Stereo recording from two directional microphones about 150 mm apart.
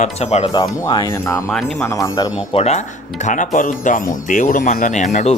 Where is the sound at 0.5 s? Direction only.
30° left (ahead or behind).